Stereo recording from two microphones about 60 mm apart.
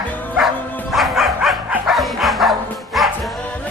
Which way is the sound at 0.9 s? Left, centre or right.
Centre.